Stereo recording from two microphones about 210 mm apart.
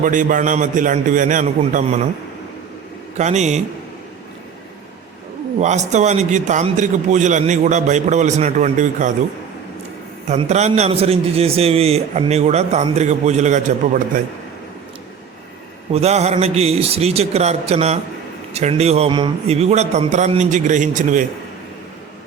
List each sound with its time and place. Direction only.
0.0 s a man's voice: 40° right (ahead or behind)
3.2 s a man's voice: 35° right (ahead or behind)
5.5 s a man's voice: 35° right (ahead or behind)
10.2 s a man's voice: 30° right (ahead or behind)
15.9 s a man's voice: 30° right (ahead or behind)